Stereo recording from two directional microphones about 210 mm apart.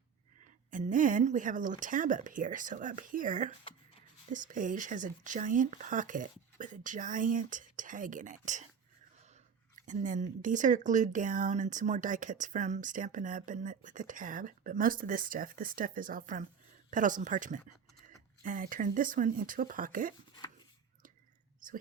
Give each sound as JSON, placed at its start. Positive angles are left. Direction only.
{"t": 0.7, "sound": "speech", "side_deg": -40}
{"t": 9.8, "sound": "speech", "side_deg": -35}